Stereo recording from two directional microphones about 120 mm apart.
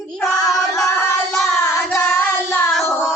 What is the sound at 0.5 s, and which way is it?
Music, centre (ahead or behind).